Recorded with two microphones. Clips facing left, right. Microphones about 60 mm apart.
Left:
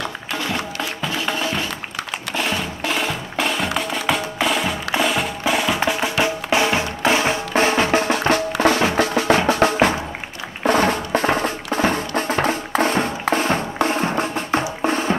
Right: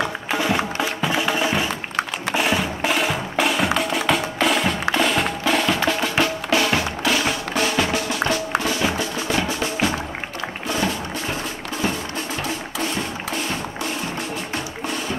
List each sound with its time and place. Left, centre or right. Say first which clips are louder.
0.3 s music: right 3 dB; centre
5.5 s drum: left 1 dB; centre
5.9 s music: left 1 dB; centre; by 15.1 s left